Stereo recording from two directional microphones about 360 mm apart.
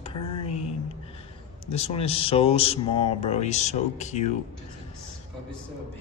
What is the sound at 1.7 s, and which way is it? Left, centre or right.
Speech, centre.